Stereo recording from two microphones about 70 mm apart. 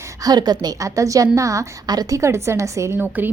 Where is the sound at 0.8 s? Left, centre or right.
Right.